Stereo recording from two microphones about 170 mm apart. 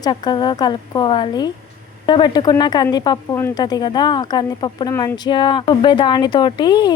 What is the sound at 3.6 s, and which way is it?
Speech, 25° left (ahead or behind).